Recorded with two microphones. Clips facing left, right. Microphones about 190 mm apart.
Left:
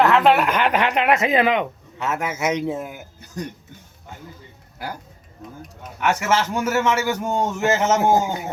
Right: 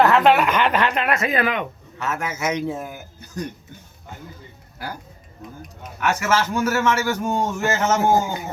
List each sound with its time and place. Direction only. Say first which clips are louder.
0.0 s speech: even; centre (ahead or behind); by 3.4 s 20° left (ahead or behind)
6.0 s speech: left 1 dB; 20° left (ahead or behind)